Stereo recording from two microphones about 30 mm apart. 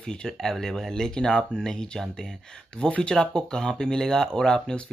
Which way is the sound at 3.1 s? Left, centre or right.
Left.